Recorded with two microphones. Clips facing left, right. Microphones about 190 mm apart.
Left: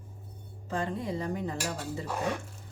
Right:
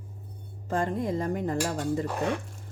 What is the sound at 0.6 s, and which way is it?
Speech, 45° right (ahead or behind).